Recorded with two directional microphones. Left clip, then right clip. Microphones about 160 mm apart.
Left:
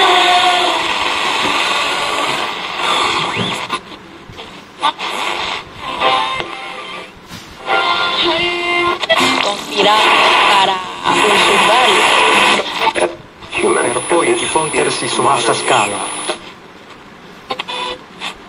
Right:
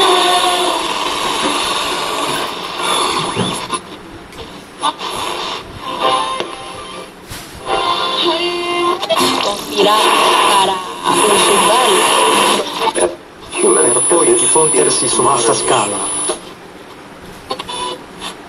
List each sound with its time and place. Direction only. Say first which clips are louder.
0.0 s train: left 1 dB; 15° left (ahead or behind)
4.7 s music: left 2 dB; 15° left (ahead or behind)
17.5 s printer: left 1 dB; 15° left (ahead or behind)